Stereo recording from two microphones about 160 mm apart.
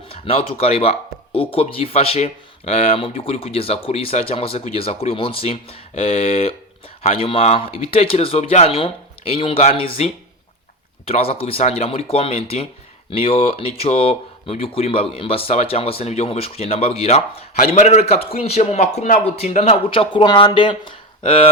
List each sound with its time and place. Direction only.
0.1 s speech: 35° left (ahead or behind)